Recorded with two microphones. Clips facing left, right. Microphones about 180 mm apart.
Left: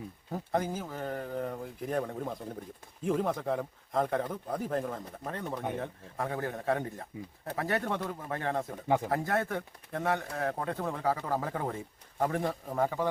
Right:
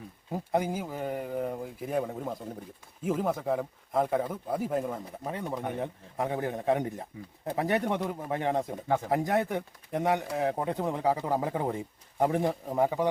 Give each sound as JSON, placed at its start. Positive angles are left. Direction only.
{"t": 0.3, "sound": "speech", "side_deg": -10}